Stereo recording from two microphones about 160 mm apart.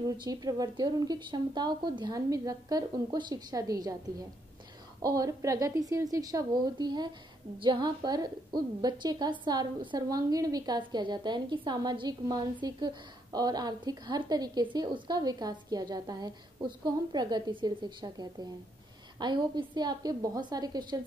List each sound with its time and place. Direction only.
0.2 s a woman's voice: 25° right (ahead or behind)